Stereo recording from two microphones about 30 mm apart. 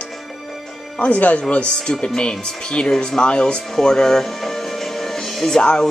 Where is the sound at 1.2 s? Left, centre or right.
Left.